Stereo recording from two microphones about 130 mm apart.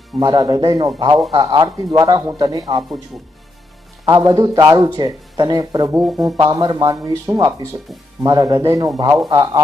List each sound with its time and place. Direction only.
0.2 s speech: 35° right (ahead or behind)
4.0 s speech: 30° right (ahead or behind)